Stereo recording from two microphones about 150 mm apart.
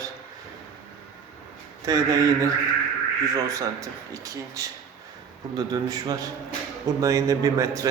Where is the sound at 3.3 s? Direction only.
20° right (ahead or behind).